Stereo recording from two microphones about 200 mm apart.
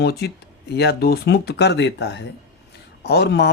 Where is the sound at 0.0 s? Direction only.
55° left (ahead or behind).